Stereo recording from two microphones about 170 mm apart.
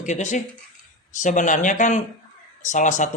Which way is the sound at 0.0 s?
45° left (ahead or behind).